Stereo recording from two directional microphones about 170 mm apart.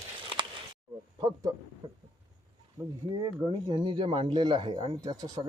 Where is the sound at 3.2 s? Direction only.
25° right (ahead or behind).